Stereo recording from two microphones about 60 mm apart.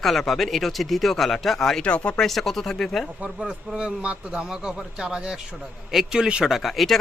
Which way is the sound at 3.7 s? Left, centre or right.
Centre.